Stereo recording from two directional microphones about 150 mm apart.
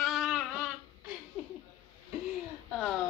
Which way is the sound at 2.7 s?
Centre (ahead or behind).